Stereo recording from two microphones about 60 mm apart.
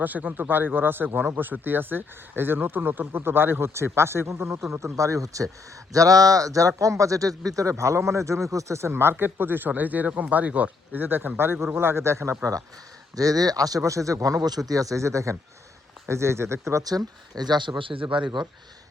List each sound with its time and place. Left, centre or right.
0.0 s speech: right
5.9 s speech: right
13.1 s speech: right
16.8 s speech: right
17.9 s speech: right